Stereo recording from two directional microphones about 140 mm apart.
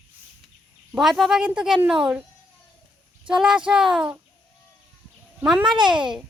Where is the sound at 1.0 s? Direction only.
Centre (ahead or behind).